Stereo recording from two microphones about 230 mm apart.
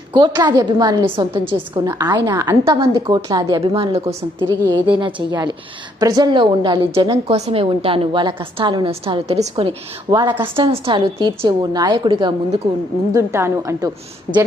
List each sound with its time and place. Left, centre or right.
0.1 s a woman's voice: centre